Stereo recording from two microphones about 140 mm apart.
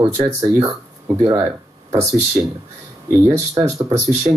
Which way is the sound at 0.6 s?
25° right (ahead or behind).